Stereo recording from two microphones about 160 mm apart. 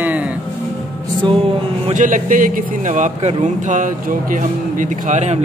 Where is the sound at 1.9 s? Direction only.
55° right (ahead or behind).